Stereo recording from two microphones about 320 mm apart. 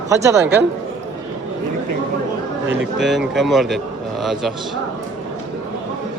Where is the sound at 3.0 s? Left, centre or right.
Centre.